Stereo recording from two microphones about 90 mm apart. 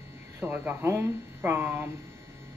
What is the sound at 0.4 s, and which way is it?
Speech, 20° right (ahead or behind).